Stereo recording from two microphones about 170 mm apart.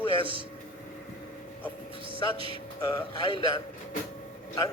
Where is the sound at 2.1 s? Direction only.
30° left (ahead or behind).